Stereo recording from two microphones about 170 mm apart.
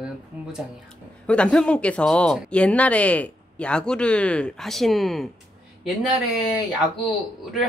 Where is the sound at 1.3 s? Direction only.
5° left (ahead or behind).